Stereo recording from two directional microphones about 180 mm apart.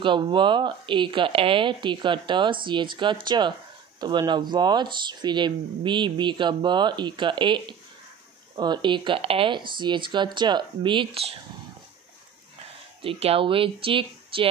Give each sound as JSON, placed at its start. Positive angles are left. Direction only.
{"t": 0.0, "sound": "speech", "side_deg": -25}
{"t": 13.0, "sound": "speech", "side_deg": -30}